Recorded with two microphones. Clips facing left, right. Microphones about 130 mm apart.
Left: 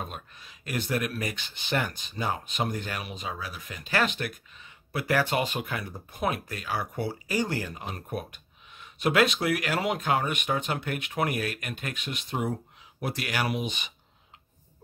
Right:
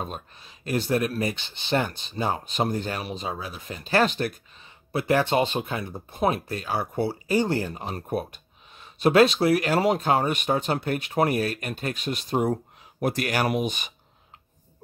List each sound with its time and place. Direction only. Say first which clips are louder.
0.0 s speech: right 4 dB; 30° right (ahead or behind); by 13.9 s 45° right (ahead or behind)